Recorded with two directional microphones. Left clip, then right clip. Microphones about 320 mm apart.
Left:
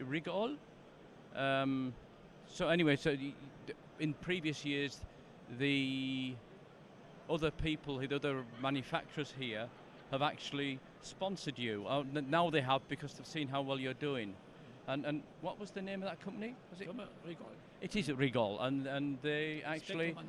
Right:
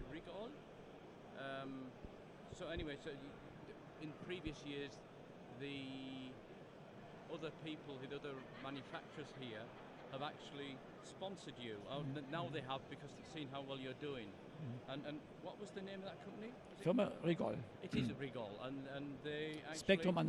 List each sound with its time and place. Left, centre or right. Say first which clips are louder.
0.1 s speech: left 14 dB; left
3.7 s speech: left 13 dB; left
11.2 s speech: left 10 dB; left
16.8 s a man's voice: right 10 dB; right
17.7 s speech: left 7 dB; left